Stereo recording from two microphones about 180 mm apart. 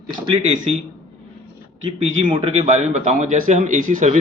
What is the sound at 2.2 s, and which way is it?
A man's voice, 30° right (ahead or behind).